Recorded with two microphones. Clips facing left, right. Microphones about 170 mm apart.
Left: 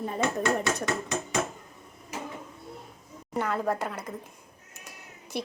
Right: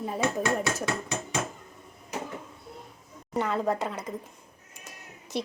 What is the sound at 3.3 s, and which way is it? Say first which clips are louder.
Speech: right 1 dB; centre (ahead or behind).